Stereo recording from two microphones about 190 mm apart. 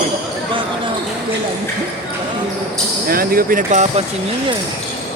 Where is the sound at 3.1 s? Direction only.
50° right (ahead or behind).